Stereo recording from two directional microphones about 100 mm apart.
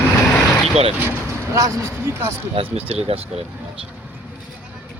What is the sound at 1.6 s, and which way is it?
Speech, 25° right (ahead or behind).